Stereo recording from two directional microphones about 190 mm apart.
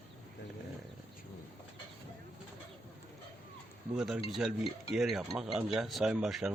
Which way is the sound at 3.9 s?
5° right (ahead or behind).